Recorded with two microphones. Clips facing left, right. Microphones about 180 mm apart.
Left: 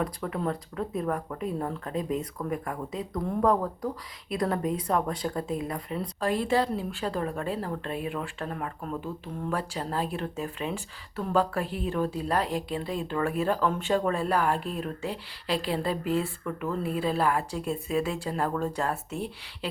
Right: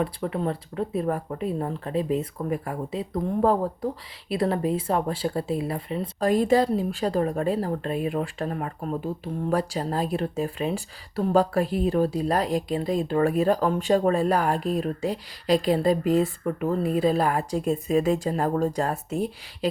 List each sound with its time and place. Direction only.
0.0 s speech: 25° right (ahead or behind)
6.1 s a woman's voice: 40° right (ahead or behind)